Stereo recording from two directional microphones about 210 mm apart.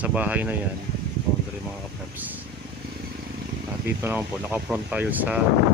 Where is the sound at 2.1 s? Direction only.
10° right (ahead or behind).